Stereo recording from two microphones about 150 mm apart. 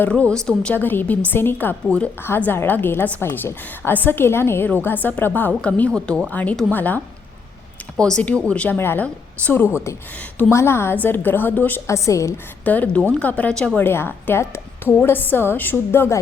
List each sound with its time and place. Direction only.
0.0 s a woman's voice: 10° left (ahead or behind)
12.6 s a woman's voice: 10° left (ahead or behind)